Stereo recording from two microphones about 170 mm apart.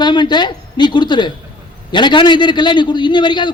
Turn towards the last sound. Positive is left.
turn(degrees=25)  # may be behind; listen again after turning